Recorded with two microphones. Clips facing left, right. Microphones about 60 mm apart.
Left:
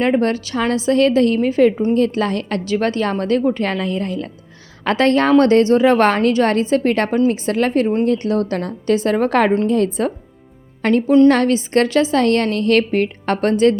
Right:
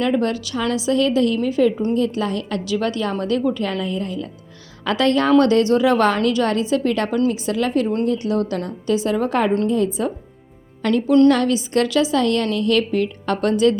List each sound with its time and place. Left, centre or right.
0.0 s a woman's voice: left
4.9 s a woman's voice: left
10.8 s a woman's voice: left